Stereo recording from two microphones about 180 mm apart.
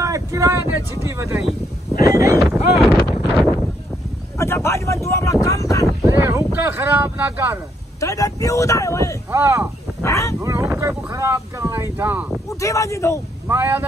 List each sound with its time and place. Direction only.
0.0 s a sound: 20° right (ahead or behind)
0.7 s speech: 15° right (ahead or behind)
2.4 s speech: centre (ahead or behind)
4.4 s a sound: 15° left (ahead or behind)
6.0 s speech: 15° right (ahead or behind)
8.0 s speech: 20° left (ahead or behind)
9.3 s speech: 15° right (ahead or behind)
10.0 s speech: 15° left (ahead or behind)
10.4 s speech: 15° right (ahead or behind)
12.4 s speech: 15° left (ahead or behind)
13.5 s speech: 10° right (ahead or behind)